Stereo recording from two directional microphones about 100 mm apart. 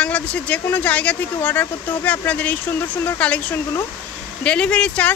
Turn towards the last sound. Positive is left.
turn(degrees=10)  # may be behind; listen again after turning